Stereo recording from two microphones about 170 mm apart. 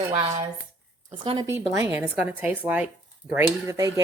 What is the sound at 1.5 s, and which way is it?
A woman's voice, 15° right (ahead or behind).